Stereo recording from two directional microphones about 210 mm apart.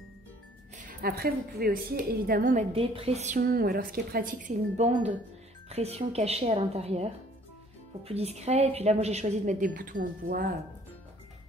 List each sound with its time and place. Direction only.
0.7 s a woman's voice: 40° right (ahead or behind)
2.7 s speech: 25° right (ahead or behind)
3.3 s a woman's voice: 45° right (ahead or behind)